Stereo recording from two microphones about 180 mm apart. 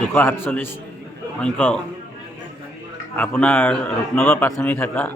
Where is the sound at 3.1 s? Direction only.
10° left (ahead or behind).